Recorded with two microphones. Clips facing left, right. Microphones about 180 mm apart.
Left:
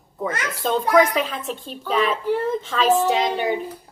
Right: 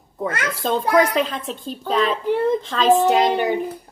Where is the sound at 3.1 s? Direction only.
55° right (ahead or behind).